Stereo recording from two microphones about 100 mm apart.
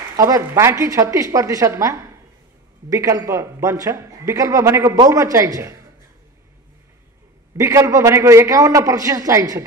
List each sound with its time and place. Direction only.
0.1 s a man's voice: 35° right (ahead or behind)
7.5 s a man's voice: 30° right (ahead or behind)